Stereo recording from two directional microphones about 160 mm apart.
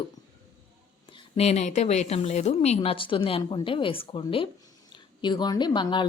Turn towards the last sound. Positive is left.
turn(degrees=30)  # may be behind; listen again after turning